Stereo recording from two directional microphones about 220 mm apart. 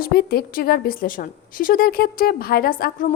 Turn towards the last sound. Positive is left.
turn(degrees=40)  # may be behind; listen again after turning